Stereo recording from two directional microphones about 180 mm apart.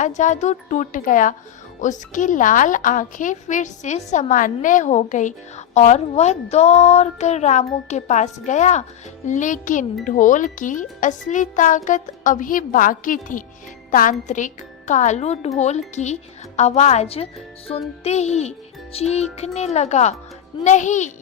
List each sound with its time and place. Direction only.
0.0 s a woman's voice: 45° left (ahead or behind)